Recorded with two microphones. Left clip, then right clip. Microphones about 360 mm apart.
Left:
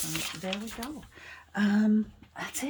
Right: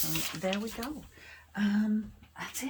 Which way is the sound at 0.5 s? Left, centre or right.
Centre.